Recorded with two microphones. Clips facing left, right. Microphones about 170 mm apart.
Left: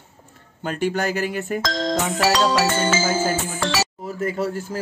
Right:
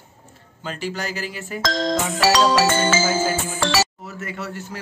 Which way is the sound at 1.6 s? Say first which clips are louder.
Right 3 dB; 90° right.